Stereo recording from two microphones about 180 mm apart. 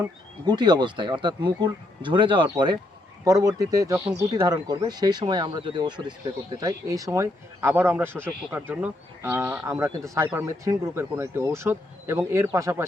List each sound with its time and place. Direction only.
0.0 s speech: 25° right (ahead or behind)